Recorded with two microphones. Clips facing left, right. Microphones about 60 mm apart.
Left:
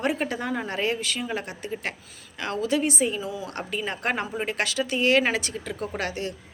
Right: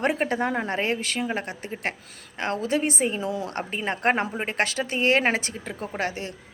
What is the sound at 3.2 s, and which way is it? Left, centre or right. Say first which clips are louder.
Speech: right 3 dB; right.